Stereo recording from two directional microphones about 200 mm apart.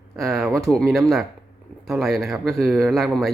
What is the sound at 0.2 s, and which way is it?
Speech, centre (ahead or behind).